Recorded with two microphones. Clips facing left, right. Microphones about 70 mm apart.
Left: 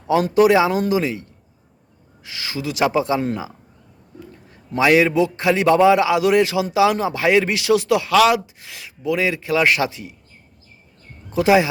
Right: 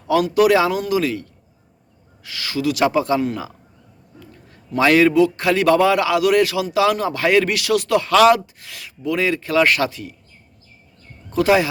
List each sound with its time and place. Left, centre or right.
0.3 s a man's voice: left
3.2 s a man's voice: left
4.8 s a man's voice: centre
8.1 s speech: centre
8.5 s speech: centre
11.3 s speech: centre